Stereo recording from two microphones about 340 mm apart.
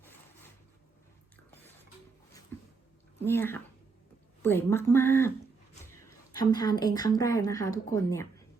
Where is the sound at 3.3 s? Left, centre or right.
Centre.